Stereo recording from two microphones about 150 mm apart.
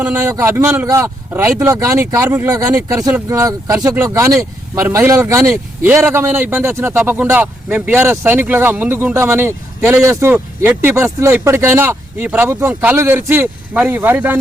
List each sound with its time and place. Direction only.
0.0 s a man's voice: 15° right (ahead or behind)